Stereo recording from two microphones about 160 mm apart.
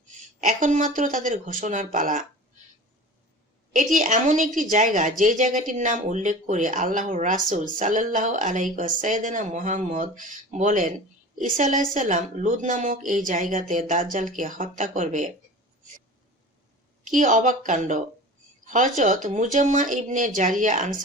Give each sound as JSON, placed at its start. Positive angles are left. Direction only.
{"t": 0.4, "sound": "a woman's voice", "side_deg": -55}
{"t": 3.7, "sound": "a woman's voice", "side_deg": -55}
{"t": 17.0, "sound": "a woman's voice", "side_deg": -55}